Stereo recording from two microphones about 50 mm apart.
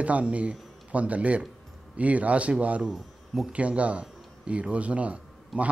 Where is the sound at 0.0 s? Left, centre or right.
Right.